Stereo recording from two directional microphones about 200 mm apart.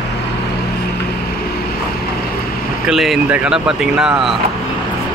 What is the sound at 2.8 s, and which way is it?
Speech, centre (ahead or behind).